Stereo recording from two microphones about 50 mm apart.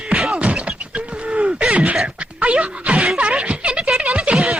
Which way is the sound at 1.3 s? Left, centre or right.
Right.